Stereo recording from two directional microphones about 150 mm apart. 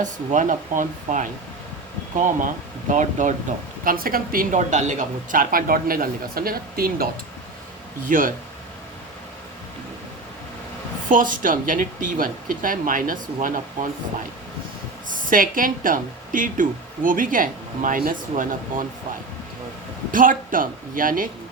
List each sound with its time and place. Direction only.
0.0 s a woman's voice: 55° right (ahead or behind)
3.8 s a woman's voice: 75° right (ahead or behind)
8.0 s a woman's voice: 65° right (ahead or behind)
11.1 s a woman's voice: 65° right (ahead or behind)
15.1 s a woman's voice: 65° right (ahead or behind)
20.1 s a woman's voice: 65° right (ahead or behind)